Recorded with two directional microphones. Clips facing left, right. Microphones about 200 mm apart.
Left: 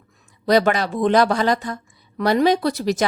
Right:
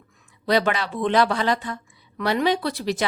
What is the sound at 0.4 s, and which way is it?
Speech, 45° left (ahead or behind).